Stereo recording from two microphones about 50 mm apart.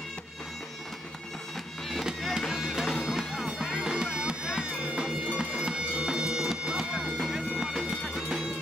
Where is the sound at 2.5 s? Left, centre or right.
Centre.